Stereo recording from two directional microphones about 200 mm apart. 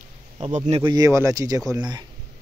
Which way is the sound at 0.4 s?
35° right (ahead or behind).